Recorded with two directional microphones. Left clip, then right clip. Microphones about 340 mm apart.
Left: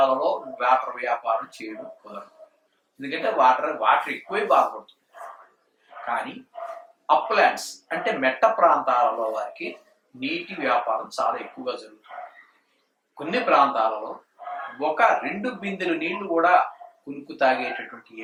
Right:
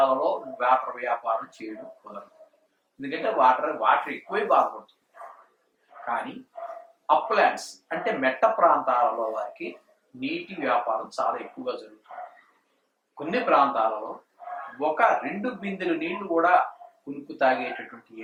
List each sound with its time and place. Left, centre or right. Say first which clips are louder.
0.0 s speech: left 1 dB; centre
0.3 s a sound: left 2 dB; centre
0.6 s speech: left 2 dB; centre
3.0 s speech: left 2 dB; centre
5.9 s speech: left 2 dB; centre
13.1 s speech: left 2 dB; centre
13.9 s speech: left 1 dB; centre
14.7 s speech: left 2 dB; centre